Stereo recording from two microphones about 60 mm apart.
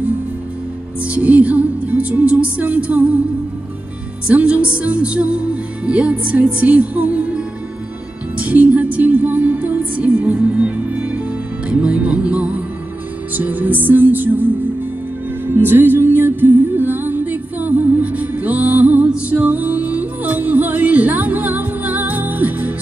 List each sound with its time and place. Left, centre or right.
1.0 s music: right
4.3 s music: right